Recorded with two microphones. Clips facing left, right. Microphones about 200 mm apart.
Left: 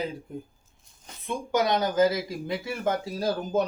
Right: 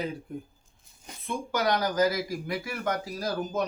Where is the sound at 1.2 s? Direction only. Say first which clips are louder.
Left 2 dB; 20° left (ahead or behind).